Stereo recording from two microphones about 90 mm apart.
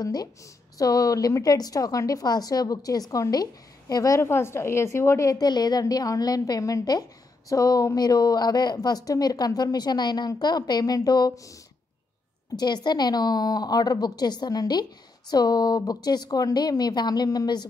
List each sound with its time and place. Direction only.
0.0 s a woman's voice: 45° left (ahead or behind)
4.2 s a woman's voice: 30° left (ahead or behind); by 11.5 s 45° left (ahead or behind)
12.5 s a woman's voice: 50° left (ahead or behind)